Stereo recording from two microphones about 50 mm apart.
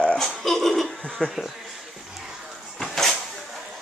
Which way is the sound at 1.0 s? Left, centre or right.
Centre.